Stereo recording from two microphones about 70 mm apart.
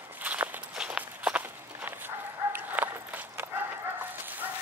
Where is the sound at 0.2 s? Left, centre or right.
Right.